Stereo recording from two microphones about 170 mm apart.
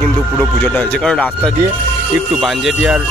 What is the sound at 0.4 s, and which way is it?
Speech, 5° left (ahead or behind).